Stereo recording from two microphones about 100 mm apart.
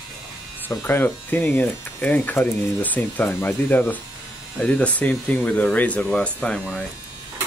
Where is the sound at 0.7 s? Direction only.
20° left (ahead or behind).